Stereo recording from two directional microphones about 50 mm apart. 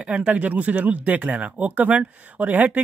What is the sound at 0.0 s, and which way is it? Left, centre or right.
Speech, right.